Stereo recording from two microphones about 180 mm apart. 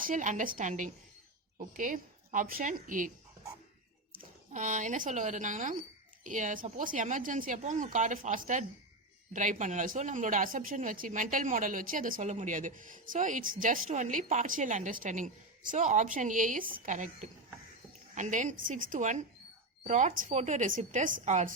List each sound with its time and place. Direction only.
0.0 s a woman's voice: 45° right (ahead or behind)
4.1 s a woman's voice: 45° right (ahead or behind)